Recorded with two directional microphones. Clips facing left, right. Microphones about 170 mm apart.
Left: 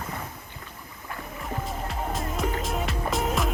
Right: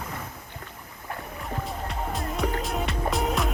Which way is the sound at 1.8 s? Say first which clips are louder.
Even; centre (ahead or behind).